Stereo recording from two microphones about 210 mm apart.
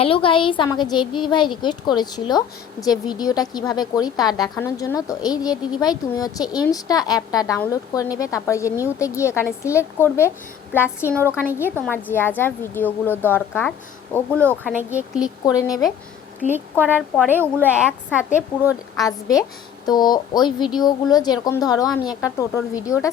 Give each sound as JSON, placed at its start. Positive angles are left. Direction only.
{"t": 0.0, "sound": "a woman's voice", "side_deg": 25}
{"t": 14.7, "sound": "a woman's voice", "side_deg": -10}
{"t": 15.4, "sound": "a woman's voice", "side_deg": 15}
{"t": 16.8, "sound": "a woman's voice", "side_deg": -5}
{"t": 19.0, "sound": "a woman's voice", "side_deg": 15}